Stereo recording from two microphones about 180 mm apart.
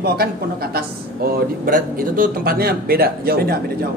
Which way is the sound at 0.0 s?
60° right (ahead or behind).